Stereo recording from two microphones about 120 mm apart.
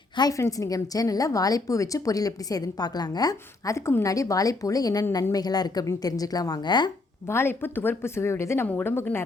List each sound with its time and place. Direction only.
0.2 s a woman's voice: 30° left (ahead or behind)
7.3 s a woman's voice: 20° left (ahead or behind)